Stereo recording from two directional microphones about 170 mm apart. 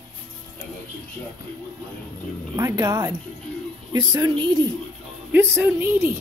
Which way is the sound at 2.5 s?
20° right (ahead or behind).